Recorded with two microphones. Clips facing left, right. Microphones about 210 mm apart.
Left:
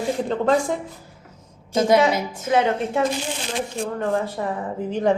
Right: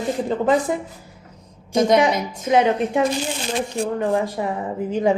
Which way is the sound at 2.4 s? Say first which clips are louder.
Right 3 dB; 15° right (ahead or behind).